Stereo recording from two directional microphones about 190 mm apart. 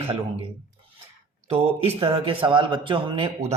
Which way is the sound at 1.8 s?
30° right (ahead or behind).